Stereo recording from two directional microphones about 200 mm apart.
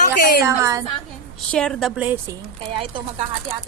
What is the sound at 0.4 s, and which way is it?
Speech, 15° right (ahead or behind).